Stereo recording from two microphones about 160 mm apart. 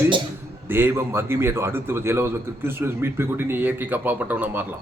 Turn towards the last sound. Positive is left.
turn(degrees=-10)  # may be behind; listen again after turning